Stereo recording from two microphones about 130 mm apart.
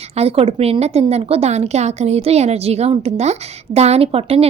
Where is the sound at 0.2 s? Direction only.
50° right (ahead or behind).